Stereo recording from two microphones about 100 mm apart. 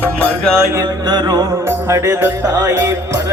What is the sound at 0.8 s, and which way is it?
Music, 45° right (ahead or behind).